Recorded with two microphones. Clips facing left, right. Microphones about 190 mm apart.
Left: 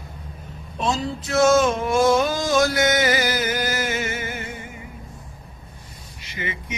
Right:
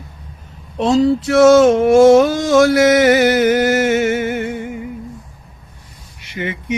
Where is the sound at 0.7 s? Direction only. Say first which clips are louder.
Right 12 dB; 85° right; by 4.7 s 65° right (ahead or behind).